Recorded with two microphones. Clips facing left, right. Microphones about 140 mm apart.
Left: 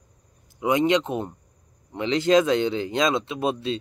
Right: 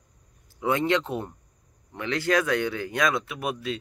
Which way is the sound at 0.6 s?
15° left (ahead or behind).